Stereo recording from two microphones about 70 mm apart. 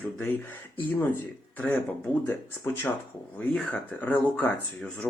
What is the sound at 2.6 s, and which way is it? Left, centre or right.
Speech, left.